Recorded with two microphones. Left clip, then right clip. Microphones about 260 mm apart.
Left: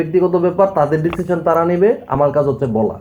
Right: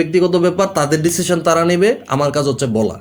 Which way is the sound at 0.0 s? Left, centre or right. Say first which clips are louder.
Right 1 dB; right.